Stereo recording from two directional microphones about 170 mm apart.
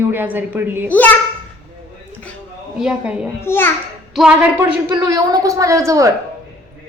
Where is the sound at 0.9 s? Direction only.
10° left (ahead or behind).